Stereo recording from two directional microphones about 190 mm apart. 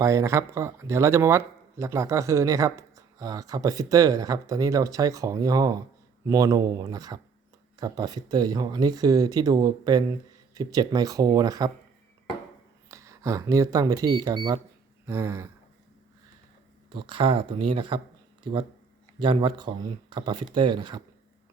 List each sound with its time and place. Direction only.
0.0 s speech: 15° right (ahead or behind)
12.9 s speech: 15° right (ahead or behind)
16.9 s speech: 25° right (ahead or behind)